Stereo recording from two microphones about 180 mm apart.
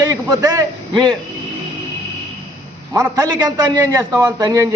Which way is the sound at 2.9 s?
20° right (ahead or behind).